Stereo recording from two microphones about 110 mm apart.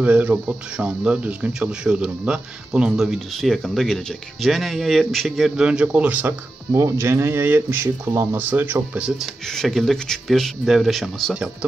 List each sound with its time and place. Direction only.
0.0 s speech: 15° right (ahead or behind)
6.7 s speech: 25° right (ahead or behind); by 9.3 s 10° right (ahead or behind)
9.5 s speech: centre (ahead or behind)